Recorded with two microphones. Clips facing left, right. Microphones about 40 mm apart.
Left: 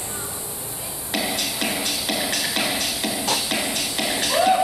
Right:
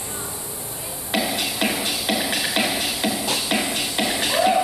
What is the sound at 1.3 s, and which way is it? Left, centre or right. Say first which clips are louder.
Music: right 2 dB; centre.